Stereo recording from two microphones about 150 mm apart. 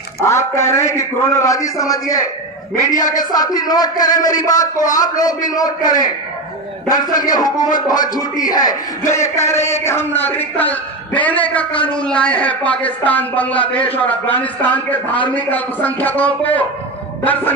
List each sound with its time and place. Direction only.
0.2 s a man's voice: 20° left (ahead or behind)
4.6 s speech: 60° left (ahead or behind)
4.9 s a man's voice: 25° left (ahead or behind); by 16.6 s 10° left (ahead or behind)